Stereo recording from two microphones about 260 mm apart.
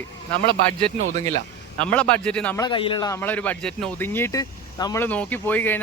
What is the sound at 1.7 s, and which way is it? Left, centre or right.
Speech, centre.